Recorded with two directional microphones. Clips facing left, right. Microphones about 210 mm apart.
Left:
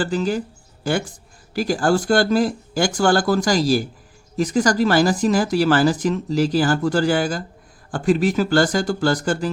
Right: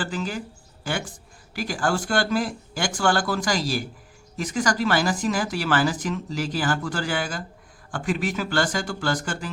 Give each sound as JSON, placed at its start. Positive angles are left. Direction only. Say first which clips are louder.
{"t": 0.0, "sound": "speech", "louder": "left 8 dB", "side_deg": 40}
{"t": 1.5, "sound": "speech", "louder": "left 7 dB", "side_deg": 35}